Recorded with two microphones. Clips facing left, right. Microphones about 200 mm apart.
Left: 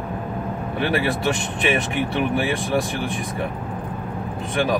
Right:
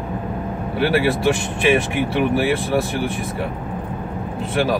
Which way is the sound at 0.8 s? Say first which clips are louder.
Right 5 dB; centre (ahead or behind).